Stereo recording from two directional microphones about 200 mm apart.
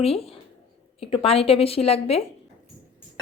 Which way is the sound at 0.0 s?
30° left (ahead or behind).